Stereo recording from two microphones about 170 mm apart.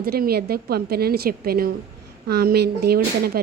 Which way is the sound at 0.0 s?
65° right (ahead or behind).